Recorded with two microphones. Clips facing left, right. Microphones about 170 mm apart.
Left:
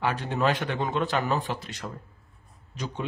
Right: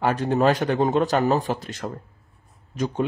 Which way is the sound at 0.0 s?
40° right (ahead or behind).